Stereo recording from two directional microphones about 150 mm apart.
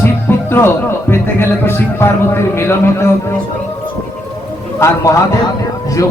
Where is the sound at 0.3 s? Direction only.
15° left (ahead or behind).